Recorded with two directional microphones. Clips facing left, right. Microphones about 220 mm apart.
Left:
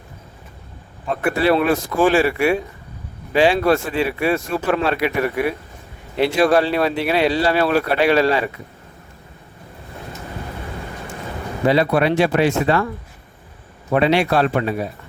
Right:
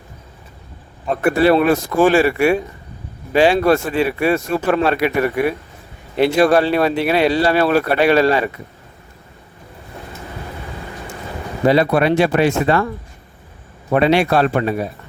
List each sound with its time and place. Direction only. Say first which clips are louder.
1.2 s speech: right 4 dB; 45° right (ahead or behind)
11.7 s speech: right 2 dB; 45° right (ahead or behind)
13.9 s speech: right 2 dB; 50° right (ahead or behind)